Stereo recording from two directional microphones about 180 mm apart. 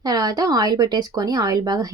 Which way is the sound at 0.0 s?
20° right (ahead or behind).